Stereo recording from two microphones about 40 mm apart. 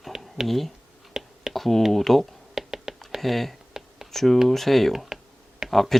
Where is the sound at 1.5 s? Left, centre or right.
Centre.